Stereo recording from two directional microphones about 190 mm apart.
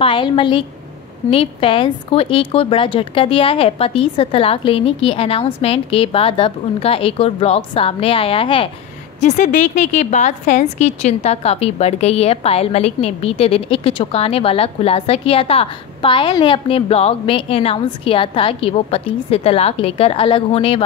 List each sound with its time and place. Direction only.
0.0 s a woman's voice: 25° left (ahead or behind)
9.2 s a woman's voice: 40° left (ahead or behind)